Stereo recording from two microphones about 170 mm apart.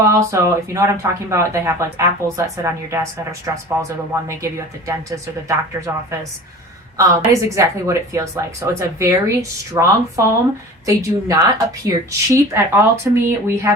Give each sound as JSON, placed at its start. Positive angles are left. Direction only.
{"t": 0.0, "sound": "a woman's voice", "side_deg": -15}